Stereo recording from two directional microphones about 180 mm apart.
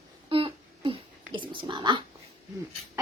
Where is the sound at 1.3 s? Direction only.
25° right (ahead or behind).